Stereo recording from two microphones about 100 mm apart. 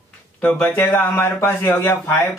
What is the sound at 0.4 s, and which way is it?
A man's voice, 10° left (ahead or behind).